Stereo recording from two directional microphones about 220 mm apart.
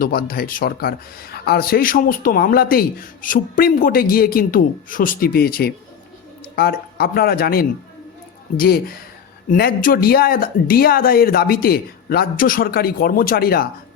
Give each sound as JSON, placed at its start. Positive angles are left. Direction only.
{"t": 0.0, "sound": "speech", "side_deg": 40}